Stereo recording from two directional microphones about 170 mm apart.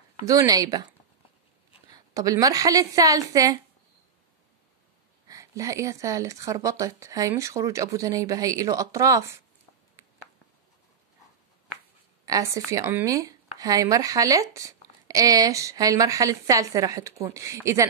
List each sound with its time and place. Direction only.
0.2 s speech: 20° right (ahead or behind)
1.9 s speech: 20° right (ahead or behind)
5.3 s speech: 20° right (ahead or behind)
12.3 s speech: 20° right (ahead or behind)